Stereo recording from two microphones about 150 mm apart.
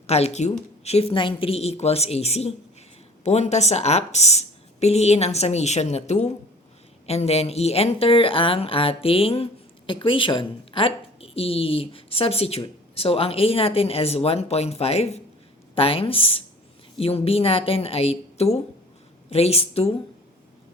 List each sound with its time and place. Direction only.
0.1 s a woman's voice: 45° left (ahead or behind)